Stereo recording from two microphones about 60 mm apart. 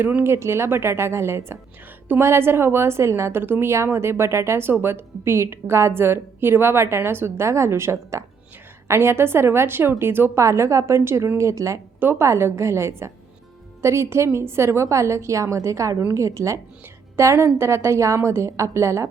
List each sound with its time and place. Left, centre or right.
0.0 s a woman's voice: right
0.3 s speech: right
3.4 s a woman's voice: right
10.3 s a woman's voice: right